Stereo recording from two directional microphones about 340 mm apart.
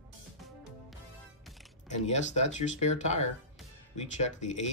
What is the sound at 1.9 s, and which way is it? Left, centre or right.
Speech, left.